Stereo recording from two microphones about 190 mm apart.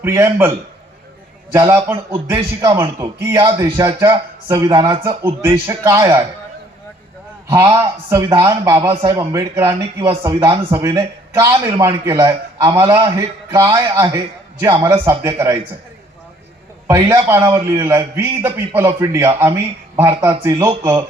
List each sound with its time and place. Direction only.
0.0 s a man's voice: 15° right (ahead or behind)
1.5 s a man's voice: 15° right (ahead or behind)
7.5 s a man's voice: 15° right (ahead or behind)
16.8 s a man's voice: 15° right (ahead or behind)